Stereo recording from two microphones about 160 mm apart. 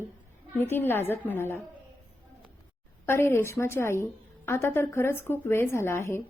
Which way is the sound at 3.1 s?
15° left (ahead or behind).